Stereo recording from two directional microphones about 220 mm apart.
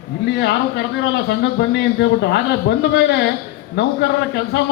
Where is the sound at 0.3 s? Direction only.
50° left (ahead or behind).